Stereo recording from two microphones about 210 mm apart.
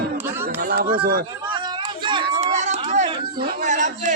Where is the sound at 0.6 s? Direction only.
45° right (ahead or behind).